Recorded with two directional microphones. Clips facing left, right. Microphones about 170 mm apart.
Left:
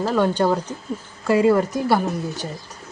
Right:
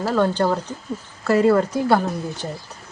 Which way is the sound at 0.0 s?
15° left (ahead or behind).